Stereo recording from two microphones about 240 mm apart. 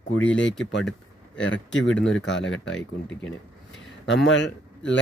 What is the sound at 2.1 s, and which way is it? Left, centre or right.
Speech, left.